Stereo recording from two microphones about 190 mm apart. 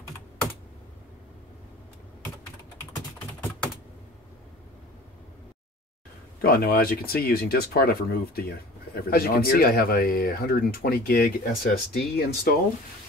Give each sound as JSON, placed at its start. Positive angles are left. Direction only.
{"t": 6.4, "sound": "speech", "side_deg": 50}